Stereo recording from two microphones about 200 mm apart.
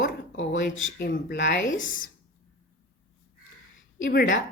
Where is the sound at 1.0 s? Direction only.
55° left (ahead or behind).